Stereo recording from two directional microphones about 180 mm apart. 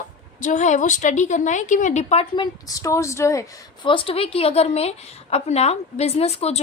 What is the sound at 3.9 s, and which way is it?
A woman's voice, 30° left (ahead or behind).